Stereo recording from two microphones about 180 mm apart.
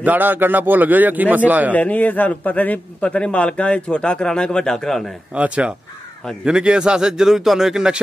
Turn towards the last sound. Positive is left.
turn(degrees=-5)  # may be behind; listen again after turning